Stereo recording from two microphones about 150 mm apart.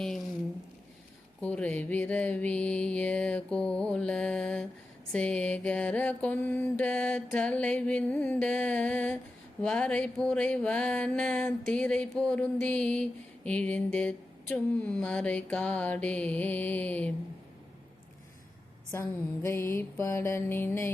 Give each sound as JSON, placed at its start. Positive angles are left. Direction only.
{"t": 1.4, "sound": "mantra", "side_deg": 10}
{"t": 18.9, "sound": "mantra", "side_deg": 15}